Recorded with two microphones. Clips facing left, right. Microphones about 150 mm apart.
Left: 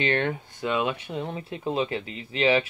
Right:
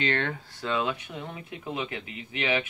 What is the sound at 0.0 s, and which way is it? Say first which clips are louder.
Speech: left 3 dB; 20° left (ahead or behind).